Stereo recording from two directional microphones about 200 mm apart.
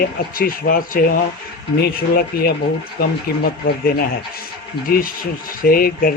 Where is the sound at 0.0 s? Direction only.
45° left (ahead or behind).